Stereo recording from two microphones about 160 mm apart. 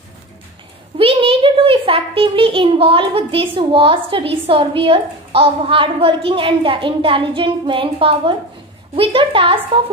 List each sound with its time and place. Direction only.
0.9 s a child's voice: 35° right (ahead or behind)